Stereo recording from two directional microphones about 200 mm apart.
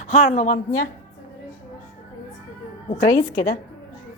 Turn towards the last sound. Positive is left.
turn(degrees=35)  # may be behind; listen again after turning